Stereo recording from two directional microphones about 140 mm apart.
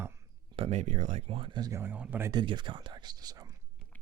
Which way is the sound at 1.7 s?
15° right (ahead or behind).